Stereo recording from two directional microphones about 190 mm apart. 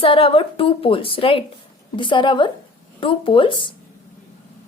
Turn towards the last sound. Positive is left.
turn(degrees=25)  # may be behind; listen again after turning